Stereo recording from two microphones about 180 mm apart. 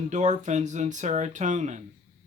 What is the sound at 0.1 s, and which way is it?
Speech, 40° right (ahead or behind).